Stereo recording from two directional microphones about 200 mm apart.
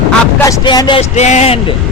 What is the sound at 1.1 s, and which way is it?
Speech, 35° left (ahead or behind).